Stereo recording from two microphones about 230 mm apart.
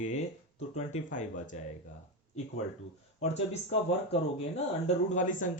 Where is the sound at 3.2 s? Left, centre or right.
Left.